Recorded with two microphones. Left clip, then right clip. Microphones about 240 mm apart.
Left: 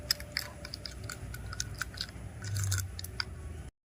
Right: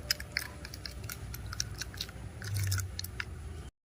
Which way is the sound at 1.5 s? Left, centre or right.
Centre.